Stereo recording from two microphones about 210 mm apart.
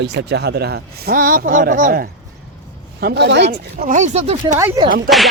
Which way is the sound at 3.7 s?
35° right (ahead or behind).